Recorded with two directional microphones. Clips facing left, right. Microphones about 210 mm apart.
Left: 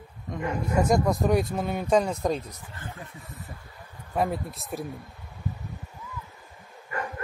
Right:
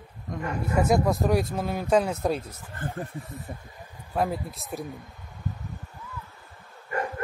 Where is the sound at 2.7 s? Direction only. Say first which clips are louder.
Right 9 dB; 50° right (ahead or behind).